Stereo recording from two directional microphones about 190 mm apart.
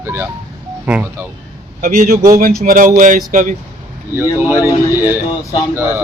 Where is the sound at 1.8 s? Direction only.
45° right (ahead or behind).